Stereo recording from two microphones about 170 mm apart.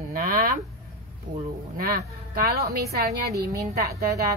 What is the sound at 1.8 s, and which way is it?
A woman's voice, 65° right (ahead or behind).